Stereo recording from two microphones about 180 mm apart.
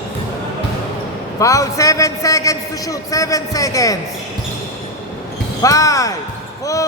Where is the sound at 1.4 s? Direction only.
20° left (ahead or behind).